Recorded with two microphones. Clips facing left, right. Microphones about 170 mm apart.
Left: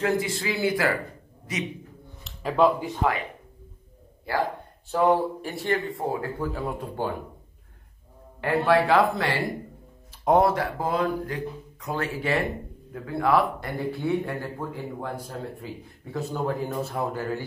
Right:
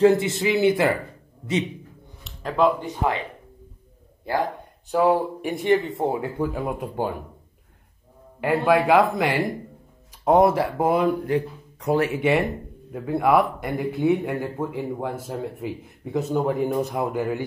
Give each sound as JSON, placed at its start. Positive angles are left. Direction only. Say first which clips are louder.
{"t": 0.0, "sound": "speech", "louder": "right 8 dB", "side_deg": -25}
{"t": 2.2, "sound": "speech", "louder": "even", "side_deg": 0}
{"t": 4.9, "sound": "speech", "louder": "right 2 dB", "side_deg": -10}
{"t": 8.4, "sound": "speech", "louder": "right 2 dB", "side_deg": -15}